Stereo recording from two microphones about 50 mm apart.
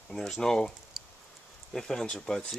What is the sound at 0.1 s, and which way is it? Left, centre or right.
Speech, centre.